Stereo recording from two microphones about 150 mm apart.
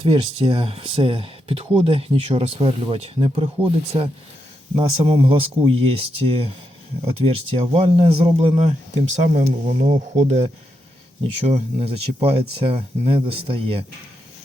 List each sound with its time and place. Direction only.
0.0 s speech: 35° right (ahead or behind)